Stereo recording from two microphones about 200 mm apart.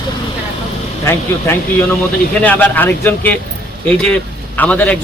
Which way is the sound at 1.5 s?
10° left (ahead or behind).